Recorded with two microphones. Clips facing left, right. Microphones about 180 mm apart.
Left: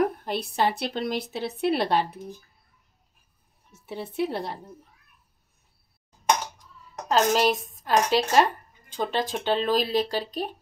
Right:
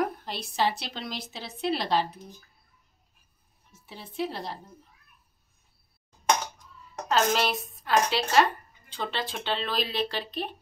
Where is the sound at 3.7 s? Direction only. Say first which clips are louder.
Left 10 dB; 60° left (ahead or behind).